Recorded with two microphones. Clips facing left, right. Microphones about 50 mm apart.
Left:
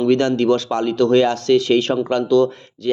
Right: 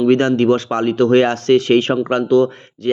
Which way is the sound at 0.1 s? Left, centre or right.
Right.